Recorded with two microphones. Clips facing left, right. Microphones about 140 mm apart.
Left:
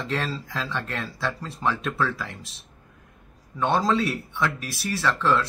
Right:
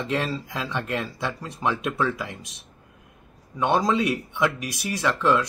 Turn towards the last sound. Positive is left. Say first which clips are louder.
# right 1 dB
turn(degrees=-15)  # may be behind; listen again after turning